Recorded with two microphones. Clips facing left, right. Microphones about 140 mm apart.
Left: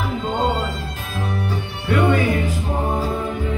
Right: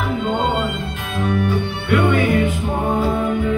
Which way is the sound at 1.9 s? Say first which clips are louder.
Right 1 dB; 35° left (ahead or behind).